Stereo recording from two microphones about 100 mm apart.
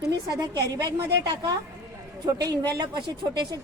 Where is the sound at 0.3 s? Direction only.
40° right (ahead or behind).